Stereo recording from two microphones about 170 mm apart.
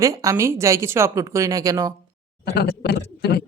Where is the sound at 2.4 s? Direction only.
75° left (ahead or behind).